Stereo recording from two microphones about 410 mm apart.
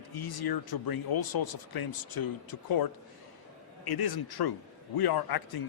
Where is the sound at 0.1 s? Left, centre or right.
Left.